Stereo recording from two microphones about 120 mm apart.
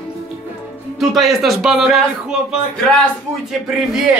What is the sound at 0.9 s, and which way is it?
A man's voice, centre (ahead or behind).